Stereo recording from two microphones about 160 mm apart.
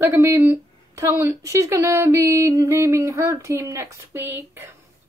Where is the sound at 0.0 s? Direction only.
15° right (ahead or behind).